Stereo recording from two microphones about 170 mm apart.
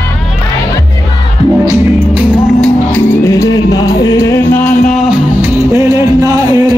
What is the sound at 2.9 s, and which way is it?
Music, 20° left (ahead or behind).